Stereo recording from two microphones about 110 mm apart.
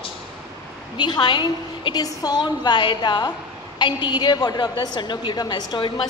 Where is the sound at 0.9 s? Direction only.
40° left (ahead or behind).